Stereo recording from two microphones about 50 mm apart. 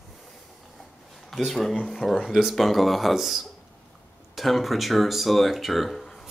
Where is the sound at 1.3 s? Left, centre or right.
Centre.